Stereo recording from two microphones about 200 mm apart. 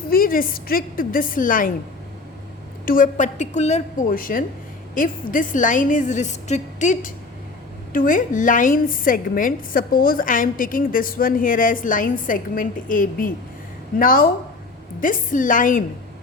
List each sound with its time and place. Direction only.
0.1 s a woman's voice: 45° left (ahead or behind)
2.8 s a woman's voice: 45° left (ahead or behind)